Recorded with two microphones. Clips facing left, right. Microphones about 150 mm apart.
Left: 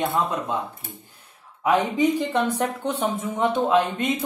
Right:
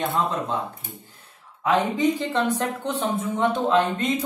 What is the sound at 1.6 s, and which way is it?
Speech, 10° left (ahead or behind).